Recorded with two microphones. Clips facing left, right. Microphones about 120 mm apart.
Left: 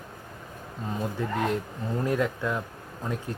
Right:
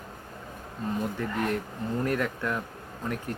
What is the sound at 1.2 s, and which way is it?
Speech, 20° left (ahead or behind).